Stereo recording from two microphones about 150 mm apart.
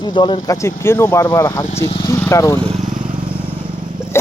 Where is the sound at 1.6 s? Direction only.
45° left (ahead or behind).